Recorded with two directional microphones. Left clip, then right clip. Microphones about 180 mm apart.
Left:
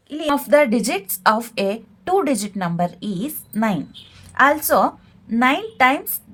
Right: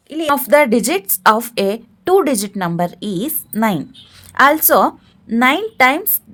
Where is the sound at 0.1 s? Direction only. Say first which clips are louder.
Right 3 dB; 45° right (ahead or behind).